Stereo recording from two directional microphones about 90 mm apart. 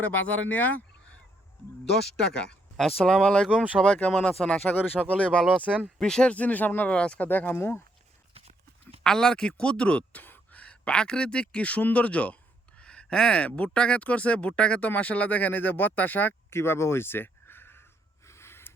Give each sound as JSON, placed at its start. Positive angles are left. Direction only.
{"t": 0.0, "sound": "speech", "side_deg": 20}
{"t": 1.8, "sound": "speech", "side_deg": 5}
{"t": 3.5, "sound": "speech", "side_deg": -15}
{"t": 3.8, "sound": "speech", "side_deg": 15}
{"t": 5.5, "sound": "speech", "side_deg": -15}
{"t": 6.0, "sound": "speech", "side_deg": 5}
{"t": 9.0, "sound": "speech", "side_deg": 5}
{"t": 18.3, "sound": "gasp", "side_deg": 30}